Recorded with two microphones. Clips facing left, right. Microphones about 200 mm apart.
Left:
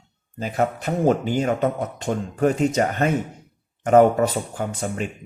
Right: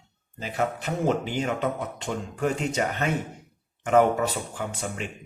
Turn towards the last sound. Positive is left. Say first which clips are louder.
# left 5 dB
turn(degrees=45)  # may be behind; listen again after turning